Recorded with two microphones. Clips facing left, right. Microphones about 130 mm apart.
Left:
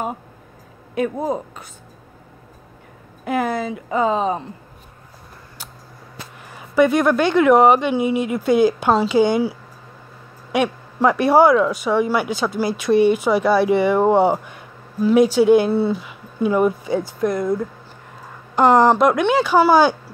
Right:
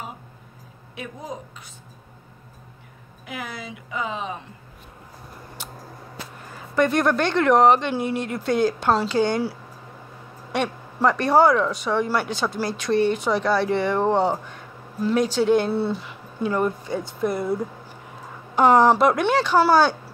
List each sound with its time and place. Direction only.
1.1 s speech: 60° left (ahead or behind)
3.3 s speech: 50° left (ahead or behind)
6.5 s speech: 5° left (ahead or behind)
10.5 s speech: 5° left (ahead or behind)
17.3 s speech: 10° right (ahead or behind); by 20.0 s 10° left (ahead or behind)